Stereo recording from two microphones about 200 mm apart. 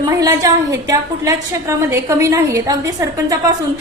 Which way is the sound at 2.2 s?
15° right (ahead or behind).